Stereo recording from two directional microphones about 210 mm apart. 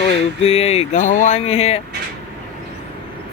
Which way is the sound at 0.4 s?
30° left (ahead or behind).